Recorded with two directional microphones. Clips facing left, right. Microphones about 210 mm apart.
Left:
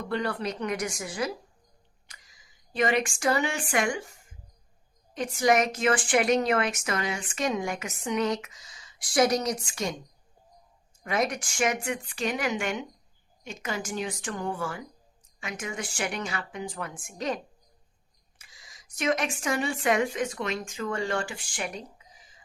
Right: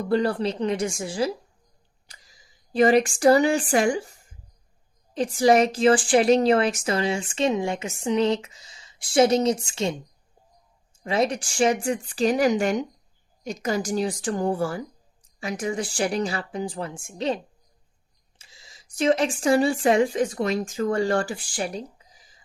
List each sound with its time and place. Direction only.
0.0 s a woman's voice: 35° right (ahead or behind)
11.0 s speech: 30° right (ahead or behind)